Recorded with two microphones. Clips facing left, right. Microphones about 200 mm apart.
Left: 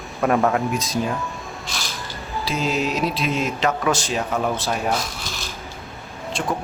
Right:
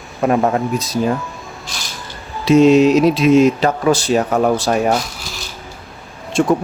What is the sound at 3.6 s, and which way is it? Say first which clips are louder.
Speech: right 6 dB; 35° right (ahead or behind).